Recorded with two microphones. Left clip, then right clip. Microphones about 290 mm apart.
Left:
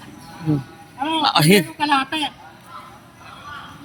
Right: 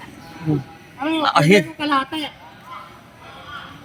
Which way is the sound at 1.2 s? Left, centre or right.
Centre.